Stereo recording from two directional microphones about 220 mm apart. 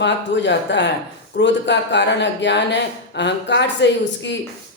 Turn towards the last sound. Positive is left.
turn(degrees=55)  # may be behind; listen again after turning